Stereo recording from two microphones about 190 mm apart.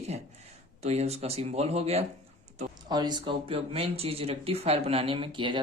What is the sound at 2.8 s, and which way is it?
Speech, 20° right (ahead or behind).